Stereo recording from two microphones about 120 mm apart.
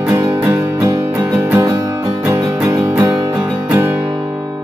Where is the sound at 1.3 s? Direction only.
15° right (ahead or behind).